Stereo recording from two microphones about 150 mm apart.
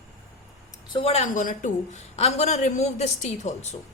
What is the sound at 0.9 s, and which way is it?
A woman's voice, 40° left (ahead or behind).